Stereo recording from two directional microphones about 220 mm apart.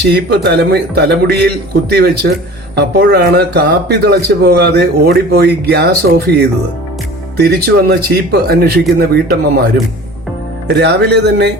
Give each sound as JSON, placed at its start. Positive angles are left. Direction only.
{"t": 0.0, "sound": "a man's voice", "side_deg": -45}
{"t": 10.7, "sound": "a man's voice", "side_deg": -50}